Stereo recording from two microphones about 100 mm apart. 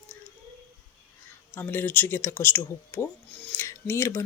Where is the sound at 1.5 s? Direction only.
20° left (ahead or behind).